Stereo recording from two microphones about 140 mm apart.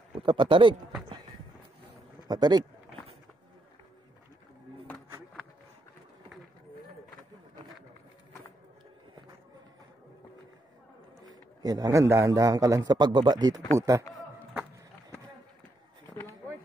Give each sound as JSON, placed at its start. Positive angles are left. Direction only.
{"t": 0.2, "sound": "speech", "side_deg": -35}
{"t": 2.2, "sound": "speech", "side_deg": -30}
{"t": 11.2, "sound": "a man's voice", "side_deg": -30}
{"t": 14.1, "sound": "a sound", "side_deg": -10}